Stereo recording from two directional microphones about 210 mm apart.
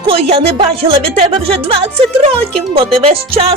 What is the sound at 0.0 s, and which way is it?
Speech, 30° right (ahead or behind).